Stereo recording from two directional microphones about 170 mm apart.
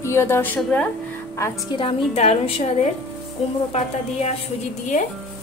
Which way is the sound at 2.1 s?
40° left (ahead or behind).